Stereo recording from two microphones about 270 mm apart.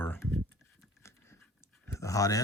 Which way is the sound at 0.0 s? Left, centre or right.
Centre.